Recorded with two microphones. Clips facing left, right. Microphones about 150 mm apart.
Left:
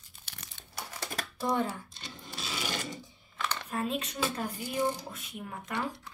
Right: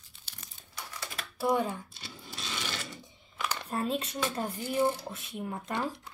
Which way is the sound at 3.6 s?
30° right (ahead or behind).